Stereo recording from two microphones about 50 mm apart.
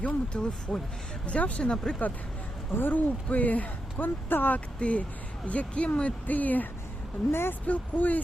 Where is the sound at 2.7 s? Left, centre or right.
Left.